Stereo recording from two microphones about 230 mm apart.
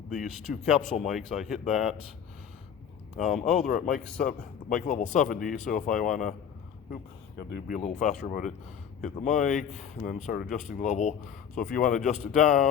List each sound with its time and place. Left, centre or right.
0.1 s speech: centre
3.2 s speech: centre
3.7 s speech: left
4.0 s speech: centre
4.3 s speech: left
7.8 s speech: left